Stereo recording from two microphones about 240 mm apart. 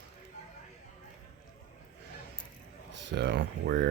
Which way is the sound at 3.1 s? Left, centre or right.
Right.